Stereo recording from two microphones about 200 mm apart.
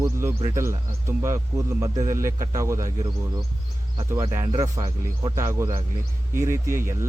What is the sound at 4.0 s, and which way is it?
Speech, 15° right (ahead or behind).